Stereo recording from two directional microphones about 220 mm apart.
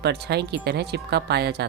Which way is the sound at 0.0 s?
50° right (ahead or behind).